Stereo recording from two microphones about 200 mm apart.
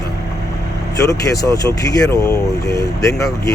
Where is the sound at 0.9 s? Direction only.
15° left (ahead or behind).